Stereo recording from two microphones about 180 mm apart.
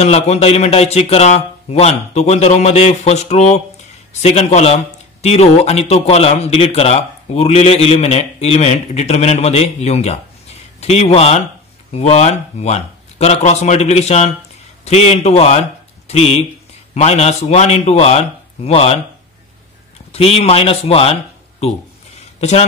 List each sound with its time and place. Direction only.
0.0 s speech: 35° left (ahead or behind)
20.1 s speech: 35° left (ahead or behind)